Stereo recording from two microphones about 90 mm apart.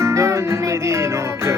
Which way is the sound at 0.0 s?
30° right (ahead or behind).